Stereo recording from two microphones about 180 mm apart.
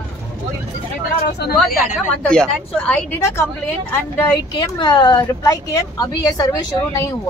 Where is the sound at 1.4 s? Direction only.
65° left (ahead or behind).